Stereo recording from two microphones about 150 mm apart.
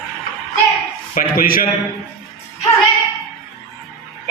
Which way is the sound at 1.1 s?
70° left (ahead or behind).